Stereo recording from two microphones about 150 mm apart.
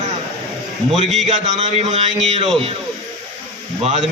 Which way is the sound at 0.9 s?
45° right (ahead or behind).